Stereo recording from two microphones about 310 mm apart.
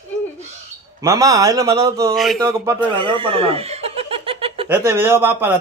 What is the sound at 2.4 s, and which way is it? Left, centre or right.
Speech, centre.